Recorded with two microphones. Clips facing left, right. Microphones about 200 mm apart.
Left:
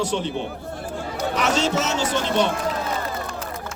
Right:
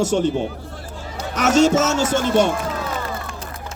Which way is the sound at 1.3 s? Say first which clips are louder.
Right 8 dB; 45° right (ahead or behind).